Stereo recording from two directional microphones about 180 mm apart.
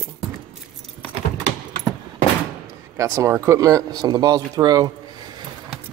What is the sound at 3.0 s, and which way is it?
Speech, 15° right (ahead or behind).